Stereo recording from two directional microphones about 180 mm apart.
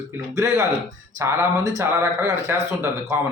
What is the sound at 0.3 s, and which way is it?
A man's voice, 15° right (ahead or behind).